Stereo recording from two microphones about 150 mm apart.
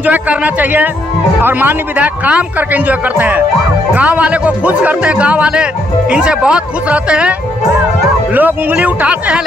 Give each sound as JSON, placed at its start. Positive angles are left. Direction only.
{"t": 0.0, "sound": "a man's voice", "side_deg": -10}